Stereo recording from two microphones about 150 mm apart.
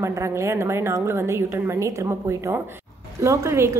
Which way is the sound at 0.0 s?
20° right (ahead or behind).